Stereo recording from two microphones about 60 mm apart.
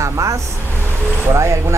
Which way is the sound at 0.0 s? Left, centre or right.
Right.